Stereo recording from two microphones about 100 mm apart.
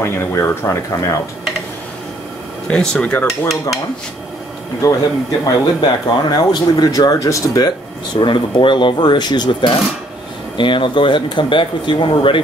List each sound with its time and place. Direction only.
0.0 s speech: 25° left (ahead or behind)
2.7 s speech: 10° left (ahead or behind)
4.8 s speech: 35° left (ahead or behind)
8.2 s speech: 55° left (ahead or behind)